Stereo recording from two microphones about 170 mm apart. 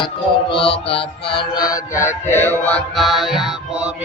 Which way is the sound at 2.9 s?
Centre (ahead or behind).